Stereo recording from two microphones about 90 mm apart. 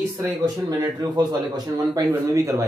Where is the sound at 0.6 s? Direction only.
45° right (ahead or behind).